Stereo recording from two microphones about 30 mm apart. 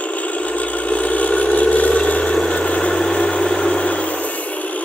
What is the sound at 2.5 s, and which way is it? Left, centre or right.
Vehicle, left.